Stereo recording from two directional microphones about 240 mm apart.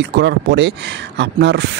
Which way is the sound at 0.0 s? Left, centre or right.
Right.